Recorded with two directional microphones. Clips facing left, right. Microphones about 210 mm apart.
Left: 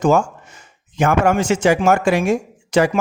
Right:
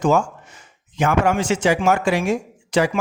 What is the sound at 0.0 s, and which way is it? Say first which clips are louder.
Speech: left 2 dB; 45° left (ahead or behind).